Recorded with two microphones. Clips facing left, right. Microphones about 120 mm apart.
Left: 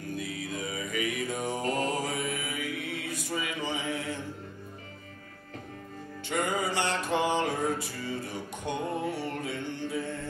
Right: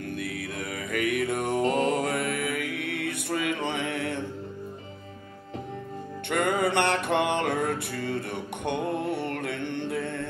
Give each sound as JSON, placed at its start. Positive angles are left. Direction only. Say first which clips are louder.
{"t": 0.1, "sound": "music", "louder": "left 2 dB", "side_deg": -60}
{"t": 6.2, "sound": "music", "louder": "right 5 dB", "side_deg": -60}